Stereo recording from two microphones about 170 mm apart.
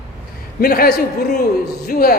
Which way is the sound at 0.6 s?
60° left (ahead or behind).